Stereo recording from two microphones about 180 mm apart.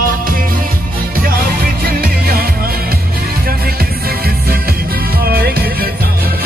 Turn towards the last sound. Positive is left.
turn(degrees=-60)  # may be behind; listen again after turning